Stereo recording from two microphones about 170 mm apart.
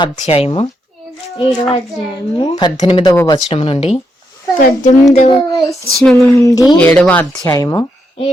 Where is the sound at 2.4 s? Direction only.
25° left (ahead or behind).